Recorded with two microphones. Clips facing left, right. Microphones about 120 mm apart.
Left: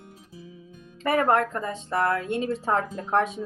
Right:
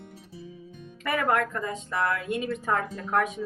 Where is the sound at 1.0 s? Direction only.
30° left (ahead or behind).